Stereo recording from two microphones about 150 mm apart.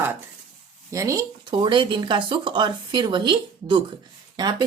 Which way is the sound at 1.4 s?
30° right (ahead or behind).